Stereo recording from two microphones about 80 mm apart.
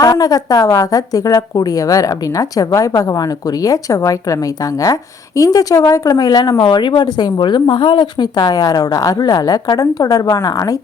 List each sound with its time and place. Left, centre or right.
0.0 s a woman's voice: left
6.7 s a woman's voice: left